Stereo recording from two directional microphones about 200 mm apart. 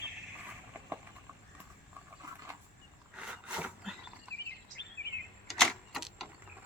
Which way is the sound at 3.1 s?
5° right (ahead or behind).